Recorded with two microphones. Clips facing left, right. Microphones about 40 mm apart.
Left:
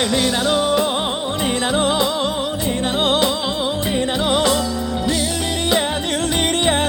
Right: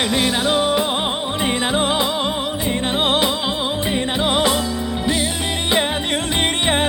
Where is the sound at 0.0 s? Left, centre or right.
Centre.